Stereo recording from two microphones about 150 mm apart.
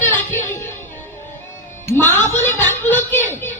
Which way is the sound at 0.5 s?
15° left (ahead or behind).